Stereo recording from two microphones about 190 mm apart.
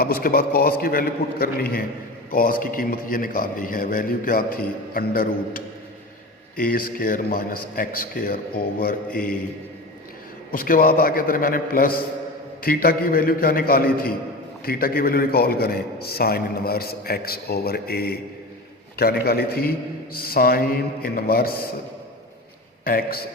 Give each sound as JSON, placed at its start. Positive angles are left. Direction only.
{"t": 0.0, "sound": "a man's voice", "side_deg": 50}
{"t": 10.5, "sound": "a man's voice", "side_deg": 50}
{"t": 22.8, "sound": "a man's voice", "side_deg": 50}